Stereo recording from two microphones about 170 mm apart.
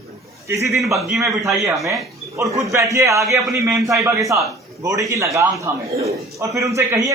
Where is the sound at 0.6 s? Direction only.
Centre (ahead or behind).